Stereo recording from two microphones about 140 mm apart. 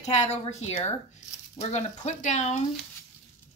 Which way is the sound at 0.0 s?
50° left (ahead or behind).